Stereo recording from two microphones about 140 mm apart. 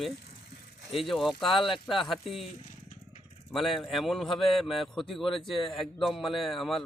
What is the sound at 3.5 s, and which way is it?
A man's voice, centre (ahead or behind).